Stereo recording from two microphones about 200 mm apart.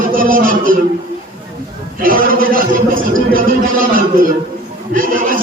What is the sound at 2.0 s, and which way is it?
Speech, 45° right (ahead or behind).